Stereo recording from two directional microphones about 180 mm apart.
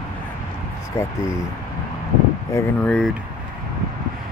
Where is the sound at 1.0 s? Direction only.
15° left (ahead or behind).